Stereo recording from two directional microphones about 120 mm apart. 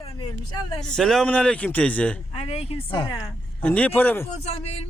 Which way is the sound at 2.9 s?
35° left (ahead or behind).